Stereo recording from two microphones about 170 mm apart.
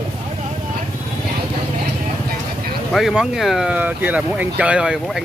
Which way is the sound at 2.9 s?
Centre (ahead or behind).